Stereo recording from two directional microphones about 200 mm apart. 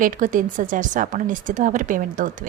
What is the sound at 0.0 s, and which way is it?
A woman's voice, 40° right (ahead or behind).